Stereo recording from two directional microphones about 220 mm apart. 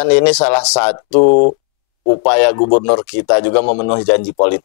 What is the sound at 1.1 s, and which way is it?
Speech, 35° left (ahead or behind).